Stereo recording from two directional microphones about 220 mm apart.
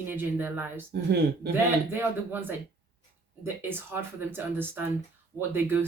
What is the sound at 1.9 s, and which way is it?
Speech, 10° right (ahead or behind).